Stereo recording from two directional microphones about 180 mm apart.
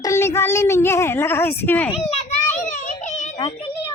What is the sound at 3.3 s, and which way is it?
Speech, 25° left (ahead or behind).